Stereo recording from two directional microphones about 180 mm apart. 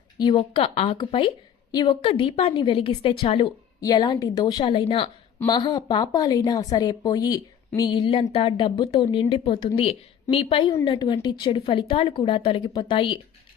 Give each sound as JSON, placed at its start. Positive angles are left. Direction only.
{"t": 0.2, "sound": "a woman's voice", "side_deg": 25}